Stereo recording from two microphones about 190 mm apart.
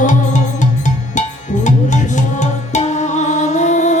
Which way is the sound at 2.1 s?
40° left (ahead or behind).